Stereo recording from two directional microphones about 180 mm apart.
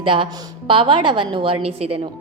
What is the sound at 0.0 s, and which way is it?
A woman's voice, 30° right (ahead or behind).